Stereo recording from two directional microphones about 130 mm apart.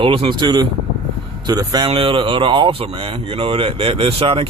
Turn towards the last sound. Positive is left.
turn(degrees=-45)  # may be behind; listen again after turning